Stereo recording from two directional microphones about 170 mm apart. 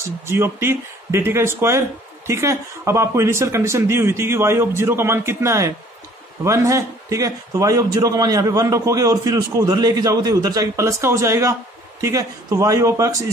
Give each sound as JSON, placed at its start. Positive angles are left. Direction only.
{"t": 0.3, "sound": "a man's voice", "side_deg": -15}